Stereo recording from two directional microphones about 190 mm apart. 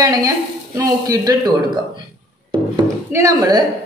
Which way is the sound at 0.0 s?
20° right (ahead or behind).